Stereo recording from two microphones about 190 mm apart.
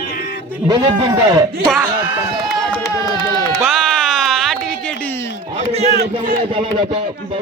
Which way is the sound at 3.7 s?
Centre (ahead or behind).